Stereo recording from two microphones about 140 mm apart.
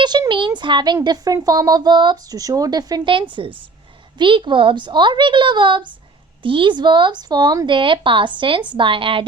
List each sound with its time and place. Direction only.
0.0 s speech: 30° right (ahead or behind)